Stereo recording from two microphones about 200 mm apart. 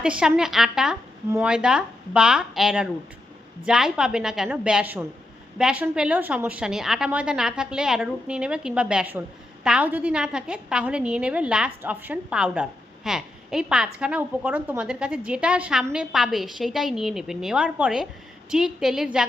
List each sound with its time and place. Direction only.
0.0 s a woman's voice: 5° right (ahead or behind)